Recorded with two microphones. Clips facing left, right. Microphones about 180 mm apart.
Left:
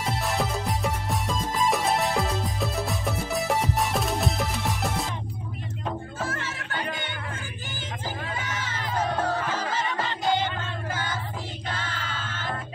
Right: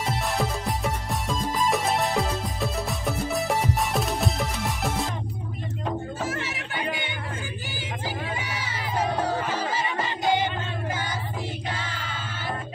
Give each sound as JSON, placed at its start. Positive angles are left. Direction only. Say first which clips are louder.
{"t": 0.0, "sound": "music", "louder": "right 1 dB", "side_deg": 0}
{"t": 6.2, "sound": "music", "louder": "right 2 dB", "side_deg": -15}
{"t": 8.4, "sound": "music", "louder": "even", "side_deg": -10}
{"t": 11.7, "sound": "music", "louder": "even", "side_deg": -10}